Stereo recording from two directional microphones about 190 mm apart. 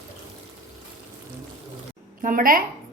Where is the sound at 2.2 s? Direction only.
45° right (ahead or behind).